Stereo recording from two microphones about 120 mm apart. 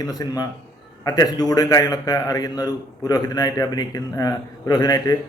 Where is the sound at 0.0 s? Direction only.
30° left (ahead or behind).